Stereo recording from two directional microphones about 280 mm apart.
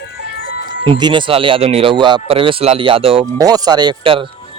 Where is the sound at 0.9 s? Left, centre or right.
Centre.